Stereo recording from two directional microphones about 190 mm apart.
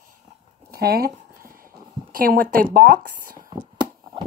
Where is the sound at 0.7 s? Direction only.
55° right (ahead or behind).